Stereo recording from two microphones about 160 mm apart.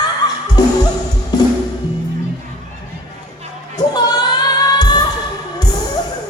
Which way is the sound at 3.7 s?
25° left (ahead or behind).